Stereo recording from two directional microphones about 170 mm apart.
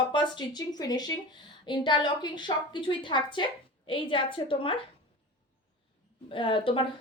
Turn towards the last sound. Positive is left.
turn(degrees=30)  # may be behind; listen again after turning